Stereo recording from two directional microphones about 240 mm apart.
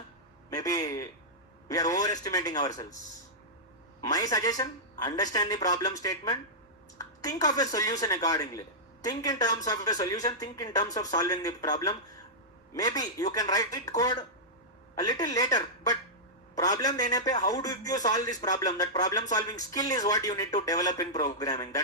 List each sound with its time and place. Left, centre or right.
0.5 s a man's voice: centre
4.0 s speech: centre